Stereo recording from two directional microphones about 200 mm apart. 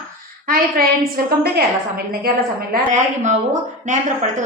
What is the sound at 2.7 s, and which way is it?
Speech, 35° right (ahead or behind).